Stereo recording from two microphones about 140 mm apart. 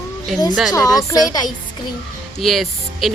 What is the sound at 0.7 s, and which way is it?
Speech, 25° left (ahead or behind).